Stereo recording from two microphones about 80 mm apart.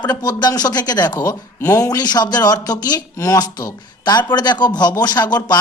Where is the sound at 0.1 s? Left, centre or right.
Left.